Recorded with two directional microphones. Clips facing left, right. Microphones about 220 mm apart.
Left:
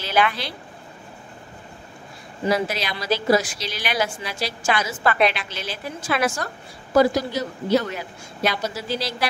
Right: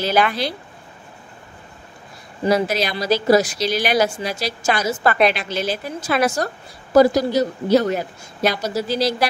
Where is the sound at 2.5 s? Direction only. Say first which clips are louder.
Right 4 dB; 40° right (ahead or behind).